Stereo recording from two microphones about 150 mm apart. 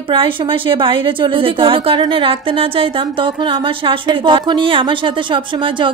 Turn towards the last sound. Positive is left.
turn(degrees=-35)  # may be behind; listen again after turning